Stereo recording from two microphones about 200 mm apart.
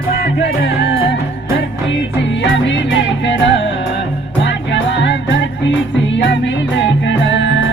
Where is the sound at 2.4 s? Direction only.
65° left (ahead or behind).